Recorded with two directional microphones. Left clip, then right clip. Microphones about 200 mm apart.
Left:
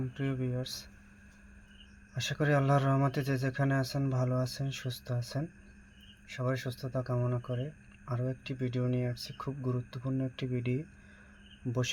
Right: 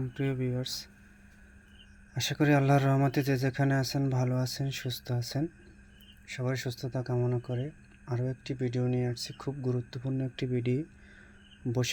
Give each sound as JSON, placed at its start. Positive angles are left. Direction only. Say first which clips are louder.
{"t": 0.1, "sound": "speech", "louder": "right 3 dB", "side_deg": -20}
{"t": 2.1, "sound": "speech", "louder": "right 3 dB", "side_deg": -20}